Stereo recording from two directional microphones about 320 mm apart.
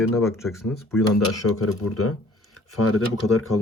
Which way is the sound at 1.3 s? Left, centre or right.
Left.